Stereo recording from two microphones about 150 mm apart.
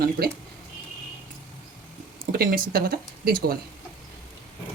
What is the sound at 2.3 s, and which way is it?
Speech, 70° right (ahead or behind).